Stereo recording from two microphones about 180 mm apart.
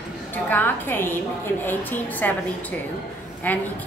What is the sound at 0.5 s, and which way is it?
A woman's voice, 10° left (ahead or behind).